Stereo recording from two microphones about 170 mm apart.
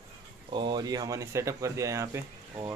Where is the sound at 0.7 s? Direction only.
20° right (ahead or behind).